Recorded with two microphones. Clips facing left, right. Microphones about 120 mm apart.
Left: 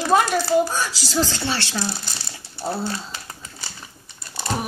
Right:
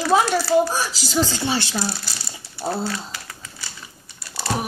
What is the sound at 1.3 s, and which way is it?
Speech, 15° right (ahead or behind).